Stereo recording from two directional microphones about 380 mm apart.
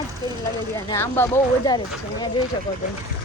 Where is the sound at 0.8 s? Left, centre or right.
Centre.